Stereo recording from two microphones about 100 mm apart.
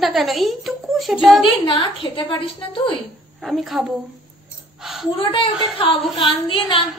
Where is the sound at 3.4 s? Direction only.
Centre (ahead or behind).